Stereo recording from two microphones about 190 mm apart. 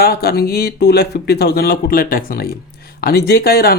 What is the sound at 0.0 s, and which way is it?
Speech, 55° left (ahead or behind).